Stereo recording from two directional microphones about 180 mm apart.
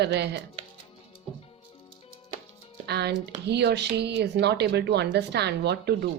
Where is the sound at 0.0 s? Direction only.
70° right (ahead or behind).